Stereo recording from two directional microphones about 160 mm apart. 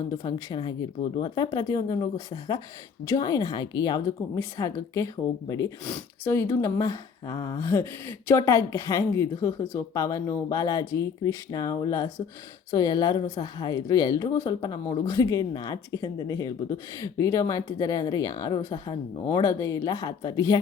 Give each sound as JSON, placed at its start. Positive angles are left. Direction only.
{"t": 0.2, "sound": "speech", "side_deg": 25}